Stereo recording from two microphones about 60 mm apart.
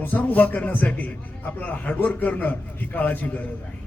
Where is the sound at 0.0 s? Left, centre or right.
Left.